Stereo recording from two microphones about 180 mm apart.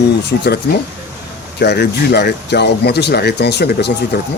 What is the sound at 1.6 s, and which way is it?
Speech, 65° left (ahead or behind).